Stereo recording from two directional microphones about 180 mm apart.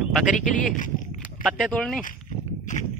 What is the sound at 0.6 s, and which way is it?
Speech, 45° left (ahead or behind).